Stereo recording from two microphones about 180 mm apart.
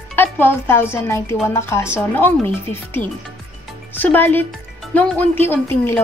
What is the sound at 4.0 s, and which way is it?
Speech, 10° left (ahead or behind).